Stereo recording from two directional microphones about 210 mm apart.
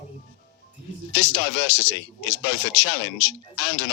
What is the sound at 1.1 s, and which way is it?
A man's voice, 55° left (ahead or behind).